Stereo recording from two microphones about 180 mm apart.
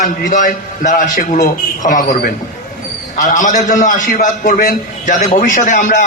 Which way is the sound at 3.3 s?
45° left (ahead or behind).